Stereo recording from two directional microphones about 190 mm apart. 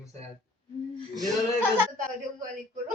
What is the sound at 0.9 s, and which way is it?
Speech, 20° right (ahead or behind).